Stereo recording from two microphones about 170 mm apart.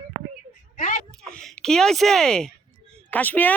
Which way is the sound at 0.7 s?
45° left (ahead or behind).